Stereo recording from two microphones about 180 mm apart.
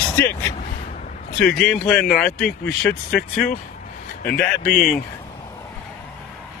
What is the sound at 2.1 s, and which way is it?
Speech, 50° left (ahead or behind).